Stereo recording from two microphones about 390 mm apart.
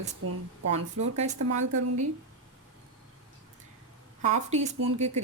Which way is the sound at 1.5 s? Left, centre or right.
Right.